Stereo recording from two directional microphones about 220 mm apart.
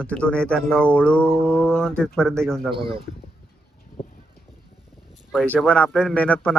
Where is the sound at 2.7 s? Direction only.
25° right (ahead or behind).